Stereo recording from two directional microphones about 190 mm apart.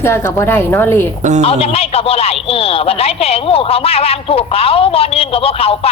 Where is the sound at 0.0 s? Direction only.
15° left (ahead or behind).